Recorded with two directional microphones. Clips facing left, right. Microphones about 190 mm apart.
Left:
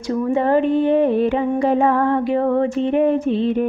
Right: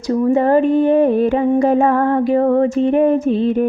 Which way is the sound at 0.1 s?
40° right (ahead or behind).